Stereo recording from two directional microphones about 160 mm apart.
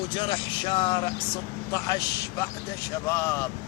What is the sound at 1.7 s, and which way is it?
Speech, 20° left (ahead or behind).